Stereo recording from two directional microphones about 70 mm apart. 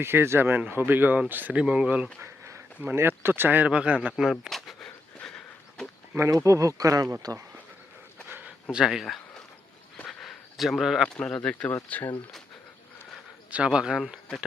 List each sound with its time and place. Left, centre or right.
0.0 s speech: right
1.6 s speech: centre
2.2 s a sound: right
2.8 s speech: right
3.7 s speech: centre
4.2 s a sound: centre
6.1 s speech: right
8.3 s a sound: right
8.7 s speech: centre
10.1 s a sound: centre
11.1 s speech: centre
11.7 s speech: left
13.7 s speech: centre